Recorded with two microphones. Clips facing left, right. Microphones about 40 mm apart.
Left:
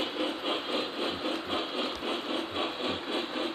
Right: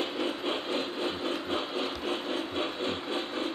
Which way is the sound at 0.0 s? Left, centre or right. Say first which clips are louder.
Right 1 dB; centre.